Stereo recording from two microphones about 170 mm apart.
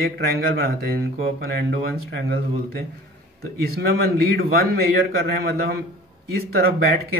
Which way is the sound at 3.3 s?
65° right (ahead or behind).